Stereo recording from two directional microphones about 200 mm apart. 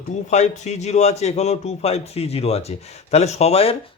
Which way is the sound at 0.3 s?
35° left (ahead or behind).